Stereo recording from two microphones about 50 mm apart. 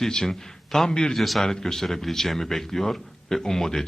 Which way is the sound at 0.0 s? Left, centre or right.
Centre.